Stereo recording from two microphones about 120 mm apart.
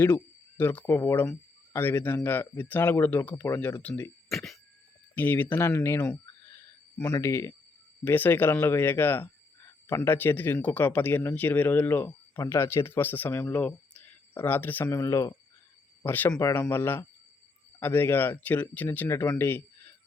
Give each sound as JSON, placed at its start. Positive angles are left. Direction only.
{"t": 0.0, "sound": "speech", "side_deg": 15}
{"t": 4.3, "sound": "speech", "side_deg": 0}
{"t": 5.1, "sound": "speech", "side_deg": 15}